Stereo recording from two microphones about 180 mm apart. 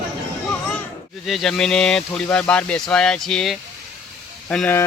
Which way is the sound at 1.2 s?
Centre (ahead or behind).